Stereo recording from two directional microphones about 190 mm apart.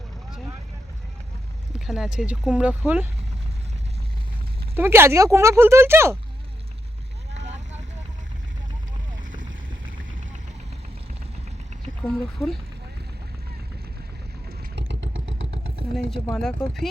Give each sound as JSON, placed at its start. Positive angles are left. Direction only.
{"t": 1.9, "sound": "speech", "side_deg": -5}
{"t": 4.7, "sound": "speech", "side_deg": -10}
{"t": 7.3, "sound": "vehicle", "side_deg": -35}
{"t": 12.0, "sound": "speech", "side_deg": 5}
{"t": 14.8, "sound": "vehicle", "side_deg": -70}
{"t": 16.0, "sound": "speech", "side_deg": 0}